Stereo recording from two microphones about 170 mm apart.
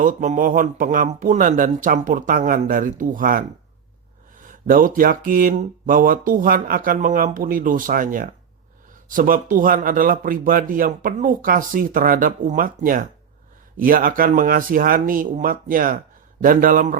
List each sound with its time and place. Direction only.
0.0 s speech: 50° right (ahead or behind)